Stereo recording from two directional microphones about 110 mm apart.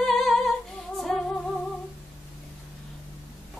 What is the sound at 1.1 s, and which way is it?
Music, 5° left (ahead or behind).